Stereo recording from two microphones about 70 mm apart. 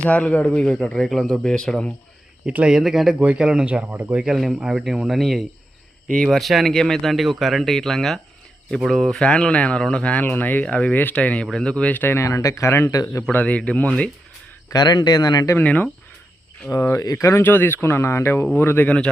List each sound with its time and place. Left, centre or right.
0.0 s speech: centre
1.0 s speech: centre
2.6 s speech: centre
3.2 s speech: centre
4.3 s speech: centre; by 12.1 s left
12.1 s speech: left
13.3 s speech: centre
14.7 s speech: left
15.5 s speech: left
16.7 s speech: left
17.4 s speech: left